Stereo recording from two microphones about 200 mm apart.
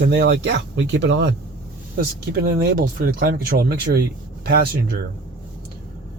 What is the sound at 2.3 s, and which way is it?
Speech, 50° right (ahead or behind).